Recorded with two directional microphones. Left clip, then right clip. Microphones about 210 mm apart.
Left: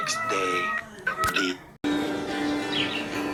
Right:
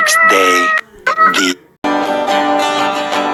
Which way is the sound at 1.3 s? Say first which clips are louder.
Right 13 dB; 50° right (ahead or behind).